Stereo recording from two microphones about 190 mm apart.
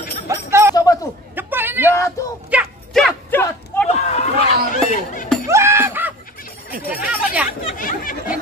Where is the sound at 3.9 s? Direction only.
35° left (ahead or behind).